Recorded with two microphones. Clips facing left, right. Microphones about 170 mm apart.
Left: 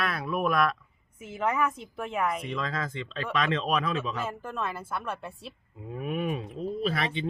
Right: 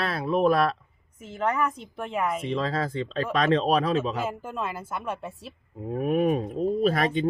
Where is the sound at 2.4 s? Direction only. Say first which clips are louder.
Right 5 dB; 30° right (ahead or behind).